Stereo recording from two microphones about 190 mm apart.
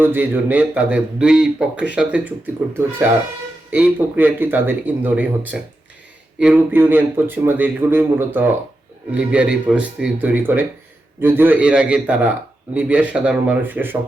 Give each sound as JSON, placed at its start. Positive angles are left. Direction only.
{"t": 0.0, "sound": "speech", "side_deg": -10}